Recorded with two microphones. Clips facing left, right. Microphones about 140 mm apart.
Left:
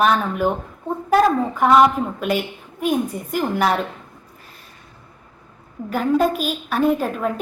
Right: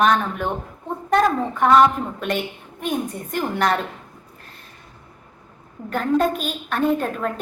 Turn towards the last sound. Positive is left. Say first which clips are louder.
# left 1 dB
turn(degrees=5)  # may be behind; listen again after turning